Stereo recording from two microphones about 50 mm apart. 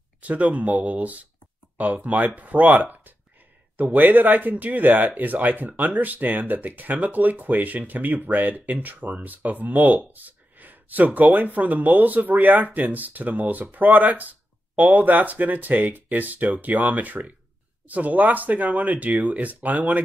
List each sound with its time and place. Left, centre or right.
0.2 s speech: right